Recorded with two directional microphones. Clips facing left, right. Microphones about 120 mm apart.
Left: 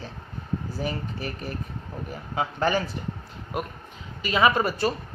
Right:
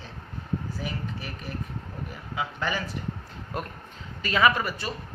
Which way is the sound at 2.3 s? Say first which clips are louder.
Left 6 dB; 40° left (ahead or behind).